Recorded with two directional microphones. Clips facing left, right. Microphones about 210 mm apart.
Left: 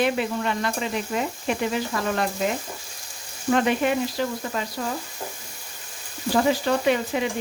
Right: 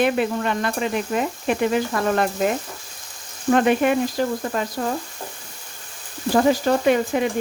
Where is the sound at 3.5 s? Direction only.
50° right (ahead or behind).